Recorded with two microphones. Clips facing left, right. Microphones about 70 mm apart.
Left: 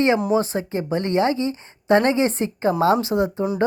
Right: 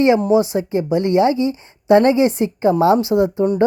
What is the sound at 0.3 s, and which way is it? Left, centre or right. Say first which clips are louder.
A woman's voice: right 5 dB; left.